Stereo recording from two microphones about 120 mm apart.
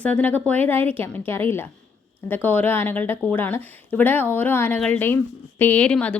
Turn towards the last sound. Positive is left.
turn(degrees=10)  # may be behind; listen again after turning